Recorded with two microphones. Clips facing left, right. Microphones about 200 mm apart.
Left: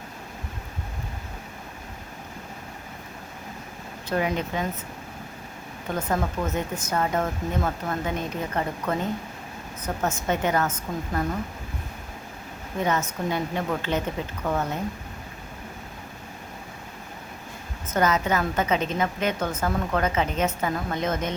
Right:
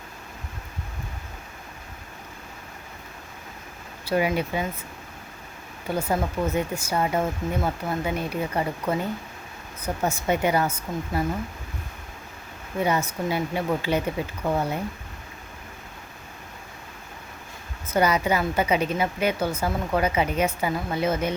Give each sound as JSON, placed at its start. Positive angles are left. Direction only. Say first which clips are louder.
{"t": 4.0, "sound": "a woman's voice", "louder": "right 2 dB", "side_deg": -10}
{"t": 5.9, "sound": "a woman's voice", "louder": "right 1 dB", "side_deg": -10}
{"t": 12.8, "sound": "a woman's voice", "louder": "right 1 dB", "side_deg": -10}
{"t": 17.8, "sound": "a woman's voice", "louder": "right 1 dB", "side_deg": -10}